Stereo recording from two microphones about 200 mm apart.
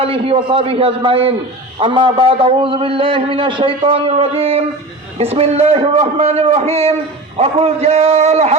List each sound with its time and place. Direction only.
0.0 s a man's voice: 25° right (ahead or behind)